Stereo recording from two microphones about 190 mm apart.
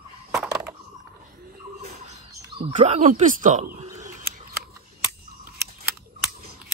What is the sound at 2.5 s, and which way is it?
Speech, 35° right (ahead or behind).